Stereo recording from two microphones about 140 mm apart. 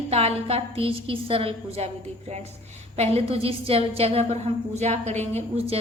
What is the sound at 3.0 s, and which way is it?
A woman's voice, 45° right (ahead or behind).